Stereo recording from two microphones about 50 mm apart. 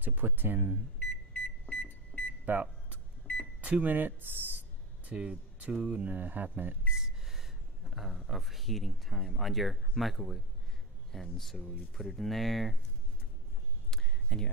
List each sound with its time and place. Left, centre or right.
0.0 s speech: right
1.3 s microwave oven: left
2.5 s speech: right
3.6 s a sound: right
5.1 s speech: centre; by 6.8 s right
6.9 s speech: centre
13.8 s a sound: centre